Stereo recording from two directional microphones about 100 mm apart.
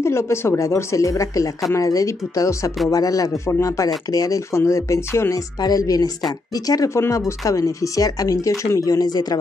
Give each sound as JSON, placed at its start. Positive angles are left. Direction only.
{"t": 0.0, "sound": "speech", "side_deg": 25}
{"t": 5.6, "sound": "speech", "side_deg": 40}